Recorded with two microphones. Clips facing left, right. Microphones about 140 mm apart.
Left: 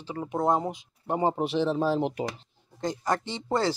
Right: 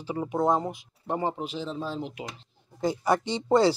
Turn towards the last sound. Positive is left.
turn(degrees=-15)  # may be behind; listen again after turning